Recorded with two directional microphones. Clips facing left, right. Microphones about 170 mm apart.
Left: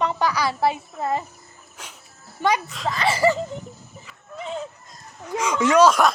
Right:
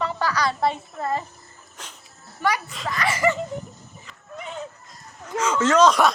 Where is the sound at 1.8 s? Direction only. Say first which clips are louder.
Even; 10° left (ahead or behind).